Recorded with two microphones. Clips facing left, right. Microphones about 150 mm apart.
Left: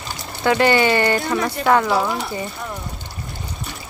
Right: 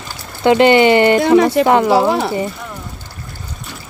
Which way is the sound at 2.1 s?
90° right.